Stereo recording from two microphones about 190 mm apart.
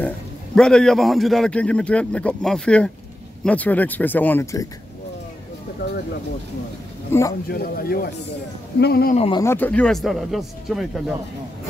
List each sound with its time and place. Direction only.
0.6 s a man's voice: 5° left (ahead or behind)
5.8 s speech: 55° left (ahead or behind)
7.1 s a man's voice: 15° left (ahead or behind)
7.5 s speech: 50° left (ahead or behind)
9.1 s speech: 30° left (ahead or behind)
9.4 s a man's voice: 10° left (ahead or behind)